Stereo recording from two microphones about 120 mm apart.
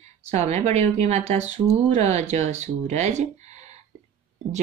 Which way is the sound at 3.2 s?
75° right (ahead or behind).